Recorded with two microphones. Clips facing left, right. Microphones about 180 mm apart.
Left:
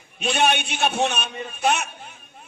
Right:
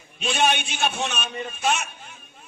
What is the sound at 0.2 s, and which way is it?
A man's voice, 60° left (ahead or behind).